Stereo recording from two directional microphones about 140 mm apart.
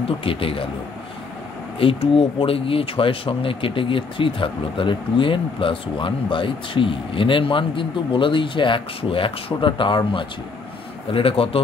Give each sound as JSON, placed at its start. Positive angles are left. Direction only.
{"t": 0.2, "sound": "speech", "side_deg": 40}
{"t": 1.8, "sound": "speech", "side_deg": 40}